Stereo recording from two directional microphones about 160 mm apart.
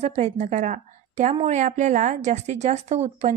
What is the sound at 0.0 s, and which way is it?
A woman's voice, 45° right (ahead or behind).